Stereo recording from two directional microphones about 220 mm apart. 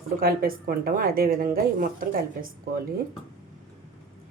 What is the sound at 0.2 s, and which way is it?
A woman's voice, 40° right (ahead or behind).